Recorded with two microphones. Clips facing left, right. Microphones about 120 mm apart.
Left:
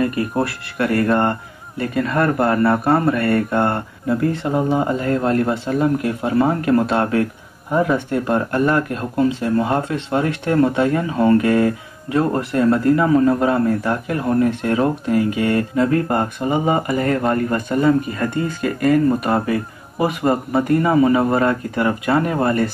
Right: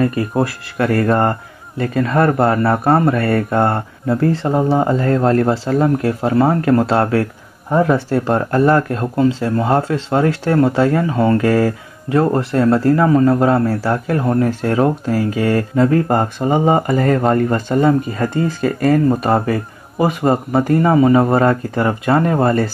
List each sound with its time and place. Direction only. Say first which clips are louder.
0.0 s speech: right 3 dB; 30° right (ahead or behind)